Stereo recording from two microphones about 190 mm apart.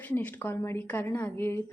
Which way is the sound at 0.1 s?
10° left (ahead or behind).